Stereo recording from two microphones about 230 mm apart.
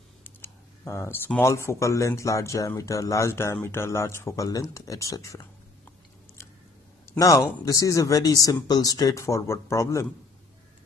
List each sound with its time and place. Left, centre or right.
0.2 s speech: centre
7.2 s speech: centre